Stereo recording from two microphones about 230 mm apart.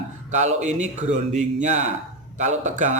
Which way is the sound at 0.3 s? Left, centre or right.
Right.